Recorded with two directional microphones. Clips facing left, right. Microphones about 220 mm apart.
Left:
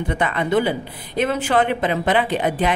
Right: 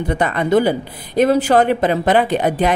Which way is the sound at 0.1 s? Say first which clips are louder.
Right 4 dB; 40° right (ahead or behind).